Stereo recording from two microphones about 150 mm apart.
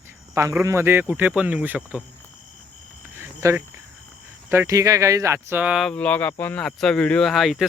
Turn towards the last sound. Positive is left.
turn(degrees=0)  # may be behind; listen again after turning